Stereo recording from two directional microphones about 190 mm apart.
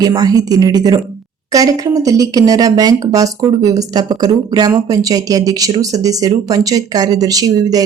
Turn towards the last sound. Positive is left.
turn(degrees=-20)  # may be behind; listen again after turning